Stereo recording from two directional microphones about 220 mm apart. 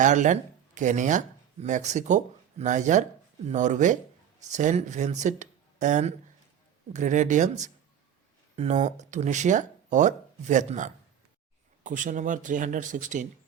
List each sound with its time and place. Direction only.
0.0 s speech: 35° right (ahead or behind)